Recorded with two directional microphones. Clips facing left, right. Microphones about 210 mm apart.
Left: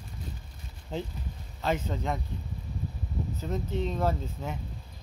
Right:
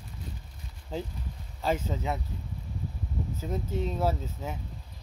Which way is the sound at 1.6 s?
10° right (ahead or behind).